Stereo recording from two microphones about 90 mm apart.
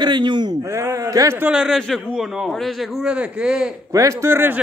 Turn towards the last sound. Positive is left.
turn(degrees=-25)  # may be behind; listen again after turning